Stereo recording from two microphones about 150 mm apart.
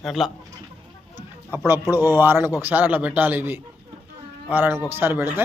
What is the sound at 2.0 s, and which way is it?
A man's voice, 15° right (ahead or behind).